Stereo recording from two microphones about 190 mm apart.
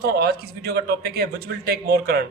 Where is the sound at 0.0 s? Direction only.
55° right (ahead or behind).